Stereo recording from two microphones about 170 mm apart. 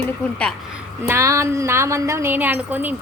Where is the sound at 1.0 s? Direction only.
15° right (ahead or behind).